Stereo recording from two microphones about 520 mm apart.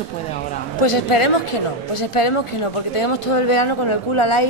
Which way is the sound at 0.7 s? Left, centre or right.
Left.